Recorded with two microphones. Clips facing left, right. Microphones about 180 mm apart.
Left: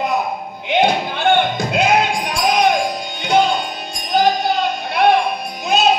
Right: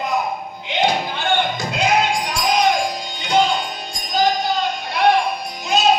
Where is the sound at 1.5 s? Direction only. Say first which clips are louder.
Left 3 dB; 55° left (ahead or behind).